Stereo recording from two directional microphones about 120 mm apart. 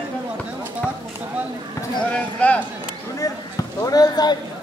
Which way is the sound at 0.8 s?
15° left (ahead or behind).